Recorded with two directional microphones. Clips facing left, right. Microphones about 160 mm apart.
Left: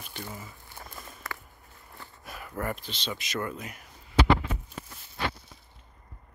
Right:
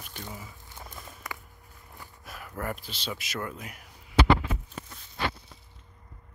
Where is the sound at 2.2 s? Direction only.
Centre (ahead or behind).